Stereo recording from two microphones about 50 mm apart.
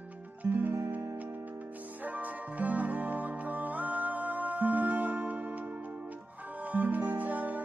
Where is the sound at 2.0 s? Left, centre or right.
Right.